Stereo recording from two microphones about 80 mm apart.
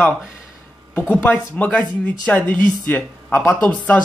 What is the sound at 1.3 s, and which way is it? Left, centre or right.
Speech, centre.